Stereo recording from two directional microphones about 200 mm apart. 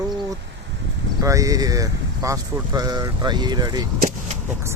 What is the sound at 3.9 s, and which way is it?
Vehicle, 40° right (ahead or behind).